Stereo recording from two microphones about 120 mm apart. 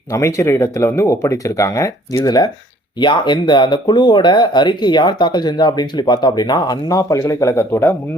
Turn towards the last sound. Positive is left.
turn(degrees=20)  # may be behind; listen again after turning